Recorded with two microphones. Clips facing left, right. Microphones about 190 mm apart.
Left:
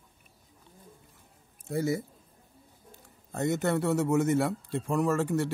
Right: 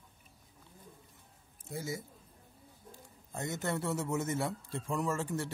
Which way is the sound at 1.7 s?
65° left (ahead or behind).